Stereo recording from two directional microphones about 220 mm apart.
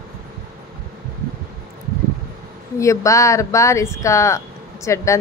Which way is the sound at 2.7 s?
15° left (ahead or behind).